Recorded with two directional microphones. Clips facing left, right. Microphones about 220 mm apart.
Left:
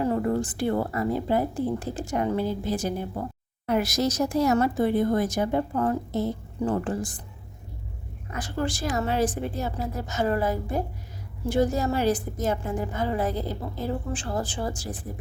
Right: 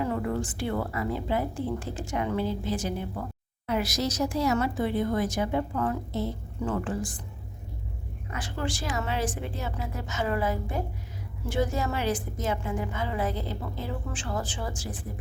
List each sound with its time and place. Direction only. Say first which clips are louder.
0.0 s a woman's voice: left 4 dB; 40° left (ahead or behind)
8.4 s a woman's voice: left 4 dB; 40° left (ahead or behind)